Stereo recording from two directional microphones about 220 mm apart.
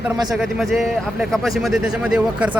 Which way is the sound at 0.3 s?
Centre (ahead or behind).